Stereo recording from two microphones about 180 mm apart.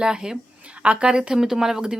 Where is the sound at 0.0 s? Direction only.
5° right (ahead or behind).